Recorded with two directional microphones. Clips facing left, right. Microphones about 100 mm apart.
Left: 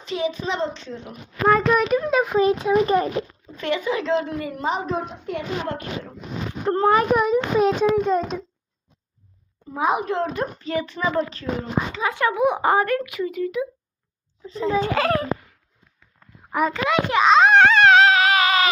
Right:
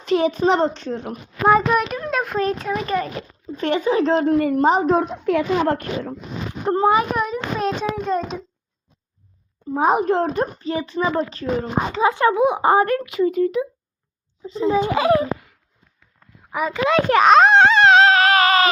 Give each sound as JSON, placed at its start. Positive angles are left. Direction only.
{"t": 0.0, "sound": "a woman's voice", "side_deg": -50}
{"t": 1.5, "sound": "a child's voice", "side_deg": -10}
{"t": 2.8, "sound": "a child's voice", "side_deg": 25}
{"t": 3.6, "sound": "a woman's voice", "side_deg": -35}
{"t": 4.9, "sound": "a woman's voice", "side_deg": -80}
{"t": 5.6, "sound": "speech", "side_deg": -55}
{"t": 6.7, "sound": "a child's voice", "side_deg": -15}
{"t": 7.1, "sound": "a child's voice", "side_deg": 5}
{"t": 9.7, "sound": "a child's voice", "side_deg": -40}
{"t": 16.5, "sound": "a child's voice", "side_deg": -5}
{"t": 17.1, "sound": "a woman's voice", "side_deg": -55}
{"t": 17.5, "sound": "a sound", "side_deg": -25}